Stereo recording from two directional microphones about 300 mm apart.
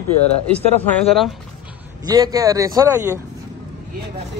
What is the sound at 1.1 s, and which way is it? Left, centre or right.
Speech, centre.